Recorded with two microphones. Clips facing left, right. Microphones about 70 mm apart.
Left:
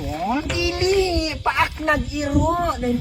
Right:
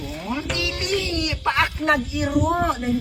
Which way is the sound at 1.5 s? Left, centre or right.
Centre.